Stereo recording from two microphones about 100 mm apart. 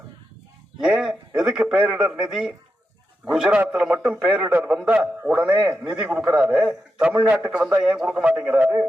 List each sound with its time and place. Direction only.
0.8 s a man's voice: 5° right (ahead or behind)